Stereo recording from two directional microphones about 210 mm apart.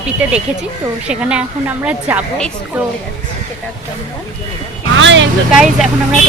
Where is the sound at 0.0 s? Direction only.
5° right (ahead or behind).